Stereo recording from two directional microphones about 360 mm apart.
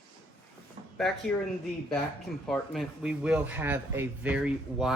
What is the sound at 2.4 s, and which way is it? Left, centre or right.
A man's voice, centre.